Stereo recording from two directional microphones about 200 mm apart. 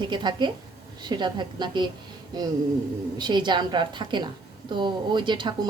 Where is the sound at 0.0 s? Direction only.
20° right (ahead or behind).